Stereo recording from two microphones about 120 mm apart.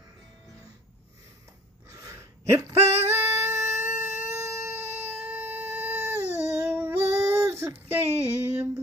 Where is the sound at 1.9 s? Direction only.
25° right (ahead or behind).